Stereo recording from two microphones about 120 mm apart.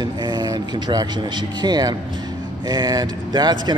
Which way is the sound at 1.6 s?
35° right (ahead or behind).